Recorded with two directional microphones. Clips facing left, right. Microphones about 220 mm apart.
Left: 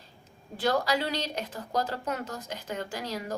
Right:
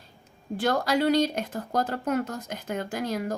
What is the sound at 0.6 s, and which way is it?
Speech, 50° right (ahead or behind).